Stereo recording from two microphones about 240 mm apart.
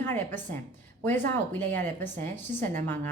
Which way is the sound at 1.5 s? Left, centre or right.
Centre.